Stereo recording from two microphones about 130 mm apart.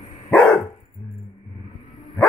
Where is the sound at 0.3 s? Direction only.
15° left (ahead or behind).